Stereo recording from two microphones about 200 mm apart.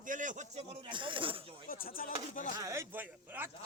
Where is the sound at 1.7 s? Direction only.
45° left (ahead or behind).